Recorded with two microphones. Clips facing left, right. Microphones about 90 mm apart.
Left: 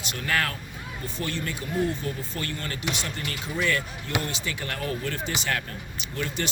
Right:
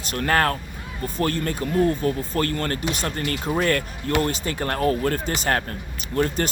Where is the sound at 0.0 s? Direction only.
45° right (ahead or behind).